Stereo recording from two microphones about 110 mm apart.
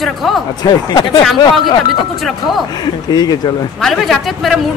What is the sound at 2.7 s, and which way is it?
Speech, 35° left (ahead or behind).